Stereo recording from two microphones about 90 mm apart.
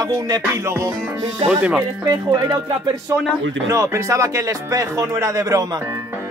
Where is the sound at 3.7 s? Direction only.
35° right (ahead or behind).